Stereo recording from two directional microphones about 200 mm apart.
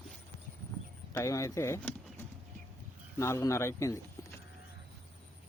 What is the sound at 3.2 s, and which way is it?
Speech, 15° left (ahead or behind).